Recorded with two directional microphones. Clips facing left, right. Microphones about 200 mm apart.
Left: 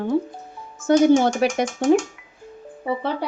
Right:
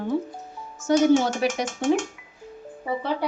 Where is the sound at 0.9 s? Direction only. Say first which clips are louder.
Left 3 dB; 55° left (ahead or behind).